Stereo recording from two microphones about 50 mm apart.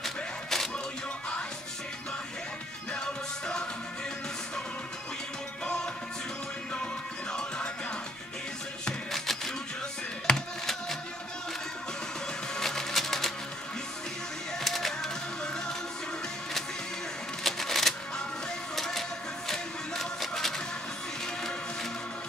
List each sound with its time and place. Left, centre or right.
0.0 s music: centre
7.3 s music: centre
9.1 s music: centre
10.2 s a sound: centre
12.5 s music: centre
14.6 s music: centre
17.4 s a sound: centre
18.8 s music: centre